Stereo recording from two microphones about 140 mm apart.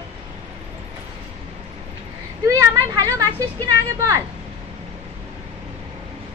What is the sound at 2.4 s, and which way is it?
Speech, 20° right (ahead or behind).